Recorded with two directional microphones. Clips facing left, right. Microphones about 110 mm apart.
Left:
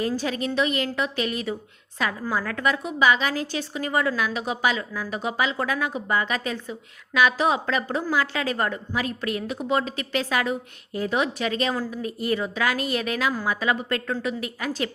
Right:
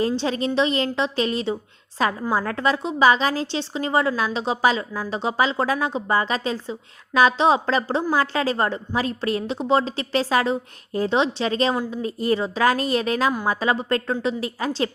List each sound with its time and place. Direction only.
0.1 s a woman's voice: 30° right (ahead or behind)